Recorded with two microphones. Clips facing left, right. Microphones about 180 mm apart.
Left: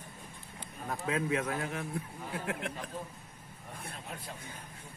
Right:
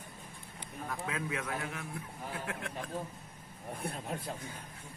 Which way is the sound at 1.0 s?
30° left (ahead or behind).